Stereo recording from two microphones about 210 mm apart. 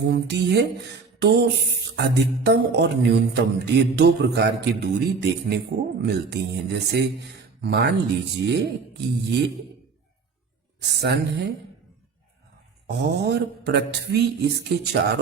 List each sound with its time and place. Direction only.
0.0 s speech: 55° right (ahead or behind)
10.8 s speech: 55° right (ahead or behind)
12.9 s speech: 50° right (ahead or behind)